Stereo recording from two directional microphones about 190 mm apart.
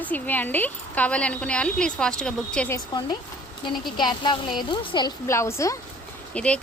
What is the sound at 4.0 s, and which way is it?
Speech, 25° left (ahead or behind).